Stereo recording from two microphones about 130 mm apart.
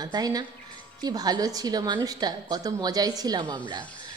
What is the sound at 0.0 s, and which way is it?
A woman's voice, 30° right (ahead or behind).